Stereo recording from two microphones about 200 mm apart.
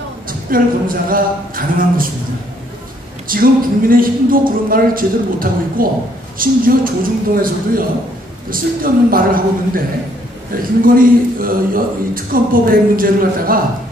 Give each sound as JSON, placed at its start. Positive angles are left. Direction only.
{"t": 0.3, "sound": "speech", "side_deg": -45}
{"t": 3.3, "sound": "speech", "side_deg": -45}
{"t": 10.6, "sound": "speech", "side_deg": -45}